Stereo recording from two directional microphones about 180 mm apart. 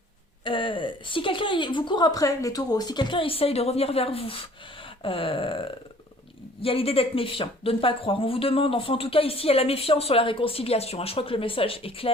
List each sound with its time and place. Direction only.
0.4 s a woman's voice: 30° left (ahead or behind)